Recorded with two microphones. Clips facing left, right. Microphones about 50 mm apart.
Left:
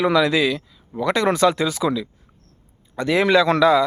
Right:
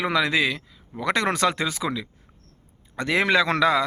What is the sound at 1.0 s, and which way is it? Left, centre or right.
A man's voice, right.